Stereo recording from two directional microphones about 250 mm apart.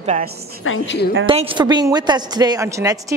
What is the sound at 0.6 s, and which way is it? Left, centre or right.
Speech, left.